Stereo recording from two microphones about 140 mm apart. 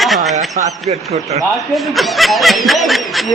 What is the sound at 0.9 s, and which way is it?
Speech, 50° right (ahead or behind).